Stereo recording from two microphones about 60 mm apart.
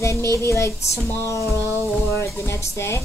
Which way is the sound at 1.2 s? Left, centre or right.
Left.